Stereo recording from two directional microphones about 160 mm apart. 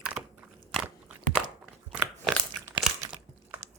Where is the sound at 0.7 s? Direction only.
10° right (ahead or behind).